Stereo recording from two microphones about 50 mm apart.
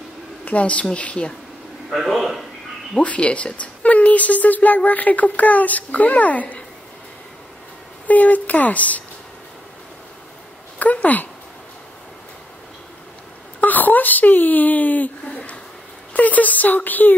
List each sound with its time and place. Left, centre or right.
0.5 s a woman's voice: left
1.9 s a man's voice: centre
3.0 s speech: left
8.1 s speech: left
10.8 s a sound: left
13.6 s a sound: left